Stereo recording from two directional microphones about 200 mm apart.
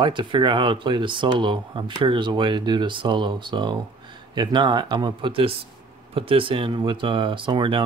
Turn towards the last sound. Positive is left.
turn(degrees=-25)  # may be behind; listen again after turning